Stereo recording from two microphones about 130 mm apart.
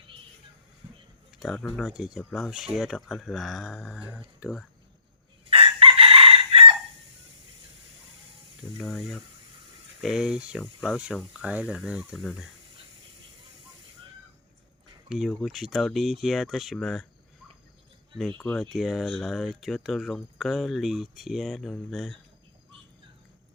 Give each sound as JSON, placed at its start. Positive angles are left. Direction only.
{"t": 1.4, "sound": "speech", "side_deg": 5}
{"t": 4.0, "sound": "speech", "side_deg": -10}
{"t": 5.5, "sound": "chicken", "side_deg": -45}
{"t": 8.8, "sound": "speech", "side_deg": 5}
{"t": 15.1, "sound": "speech", "side_deg": 0}
{"t": 18.5, "sound": "speech", "side_deg": 0}